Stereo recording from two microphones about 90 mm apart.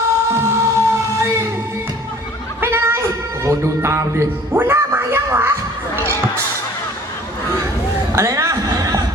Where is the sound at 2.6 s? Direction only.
25° right (ahead or behind).